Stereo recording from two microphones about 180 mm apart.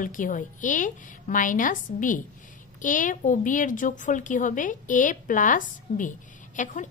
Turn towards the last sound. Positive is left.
turn(degrees=45)  # may be behind; listen again after turning